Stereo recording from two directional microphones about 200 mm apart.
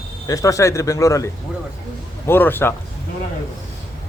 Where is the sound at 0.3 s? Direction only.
15° left (ahead or behind).